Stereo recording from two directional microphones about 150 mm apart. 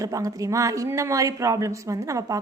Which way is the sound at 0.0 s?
20° right (ahead or behind).